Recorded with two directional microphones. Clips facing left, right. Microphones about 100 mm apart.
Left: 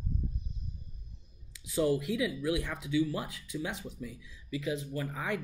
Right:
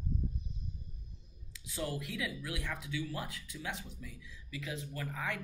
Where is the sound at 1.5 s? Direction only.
15° left (ahead or behind).